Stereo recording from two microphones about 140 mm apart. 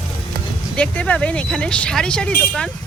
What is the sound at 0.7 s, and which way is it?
A woman's voice, 10° left (ahead or behind).